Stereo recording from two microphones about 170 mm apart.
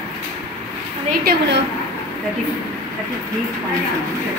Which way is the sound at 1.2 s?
90° right.